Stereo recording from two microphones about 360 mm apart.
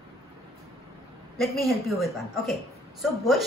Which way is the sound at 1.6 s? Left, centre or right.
Centre.